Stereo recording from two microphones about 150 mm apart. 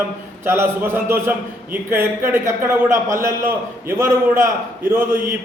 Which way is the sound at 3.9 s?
15° right (ahead or behind).